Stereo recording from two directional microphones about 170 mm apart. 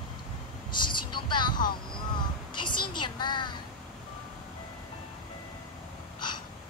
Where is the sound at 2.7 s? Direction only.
25° left (ahead or behind).